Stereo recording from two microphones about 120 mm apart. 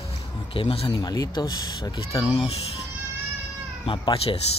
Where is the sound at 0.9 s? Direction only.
30° left (ahead or behind).